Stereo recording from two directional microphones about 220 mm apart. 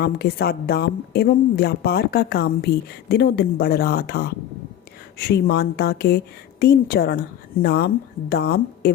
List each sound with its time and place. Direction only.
0.0 s a woman's voice: 45° left (ahead or behind)